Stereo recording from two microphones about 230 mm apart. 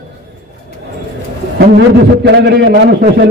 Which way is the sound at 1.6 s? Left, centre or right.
Right.